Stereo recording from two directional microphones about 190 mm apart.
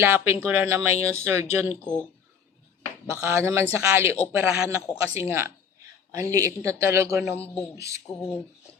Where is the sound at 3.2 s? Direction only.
15° right (ahead or behind).